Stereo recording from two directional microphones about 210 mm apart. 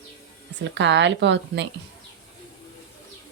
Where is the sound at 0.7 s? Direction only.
55° right (ahead or behind).